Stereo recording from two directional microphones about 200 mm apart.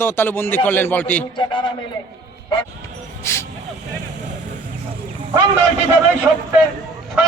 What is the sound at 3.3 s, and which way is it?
Speech, 15° left (ahead or behind).